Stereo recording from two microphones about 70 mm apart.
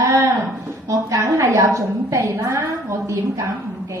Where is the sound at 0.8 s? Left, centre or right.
Right.